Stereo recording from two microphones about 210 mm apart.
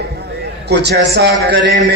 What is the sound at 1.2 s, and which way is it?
Speech, 50° right (ahead or behind).